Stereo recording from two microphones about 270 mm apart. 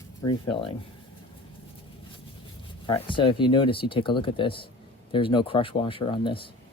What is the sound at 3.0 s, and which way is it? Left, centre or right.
Speech, centre.